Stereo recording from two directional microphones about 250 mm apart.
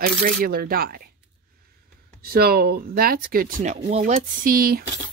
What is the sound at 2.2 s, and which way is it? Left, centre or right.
Speech, right.